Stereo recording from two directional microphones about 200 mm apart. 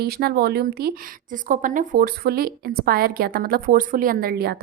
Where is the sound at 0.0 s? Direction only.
50° right (ahead or behind).